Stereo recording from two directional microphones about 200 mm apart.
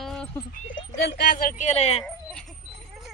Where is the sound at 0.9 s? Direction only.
55° left (ahead or behind); by 2.1 s 30° left (ahead or behind).